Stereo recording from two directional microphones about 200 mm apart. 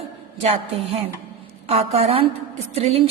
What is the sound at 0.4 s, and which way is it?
A woman's voice, 30° right (ahead or behind).